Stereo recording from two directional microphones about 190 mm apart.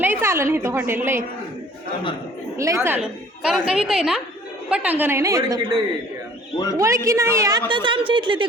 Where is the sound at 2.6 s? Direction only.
15° right (ahead or behind).